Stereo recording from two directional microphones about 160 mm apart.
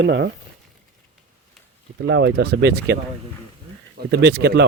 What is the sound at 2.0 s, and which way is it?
Speech, 90° right.